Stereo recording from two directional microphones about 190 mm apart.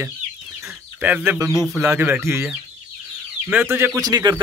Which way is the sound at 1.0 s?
5° right (ahead or behind).